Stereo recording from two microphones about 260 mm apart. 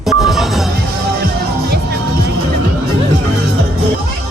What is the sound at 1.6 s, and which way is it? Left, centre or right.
Music, right.